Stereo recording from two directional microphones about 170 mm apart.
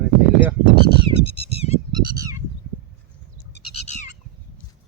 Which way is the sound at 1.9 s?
20° right (ahead or behind).